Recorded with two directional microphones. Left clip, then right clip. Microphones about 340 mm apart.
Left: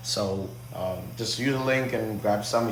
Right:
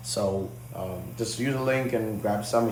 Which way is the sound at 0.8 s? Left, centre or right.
Centre.